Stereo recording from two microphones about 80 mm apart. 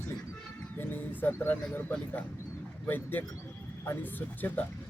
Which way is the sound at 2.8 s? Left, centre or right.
Left.